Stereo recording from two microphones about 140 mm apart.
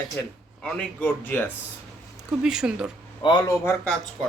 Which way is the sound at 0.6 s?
5° left (ahead or behind).